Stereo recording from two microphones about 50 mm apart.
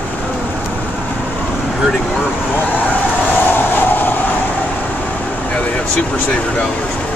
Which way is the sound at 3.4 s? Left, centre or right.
Left.